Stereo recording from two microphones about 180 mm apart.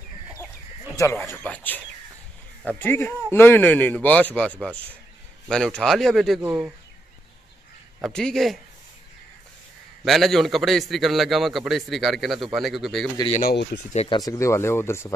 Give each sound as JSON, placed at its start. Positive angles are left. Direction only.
{"t": 0.9, "sound": "a man's voice", "side_deg": 15}
{"t": 6.4, "sound": "speech", "side_deg": -10}
{"t": 8.0, "sound": "a man's voice", "side_deg": 5}
{"t": 10.0, "sound": "a man's voice", "side_deg": 0}
{"t": 13.3, "sound": "speech", "side_deg": 50}
{"t": 13.9, "sound": "speech", "side_deg": 25}